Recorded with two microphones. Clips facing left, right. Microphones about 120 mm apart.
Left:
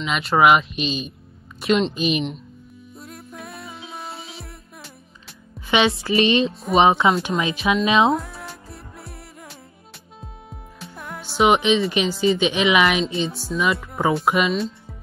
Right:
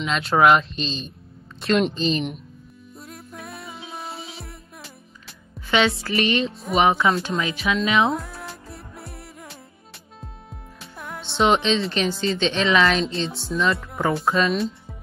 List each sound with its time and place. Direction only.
0.0 s speech: centre (ahead or behind)
3.0 s music: centre (ahead or behind)
5.7 s music: 20° left (ahead or behind)
8.1 s music: centre (ahead or behind)
10.8 s speech: centre (ahead or behind)